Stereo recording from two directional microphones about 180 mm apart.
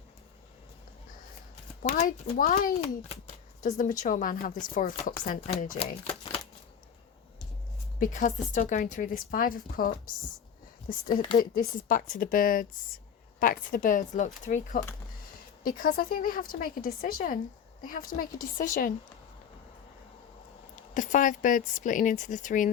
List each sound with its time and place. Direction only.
1.9 s a woman's voice: 40° left (ahead or behind)
5.8 s shuffling cards: 30° left (ahead or behind)
7.9 s a woman's voice: 45° left (ahead or behind)
11.3 s a woman's voice: 50° left (ahead or behind)
20.9 s a woman's voice: 45° left (ahead or behind)